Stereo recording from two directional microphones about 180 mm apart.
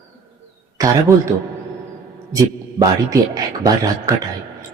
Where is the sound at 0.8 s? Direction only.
20° right (ahead or behind).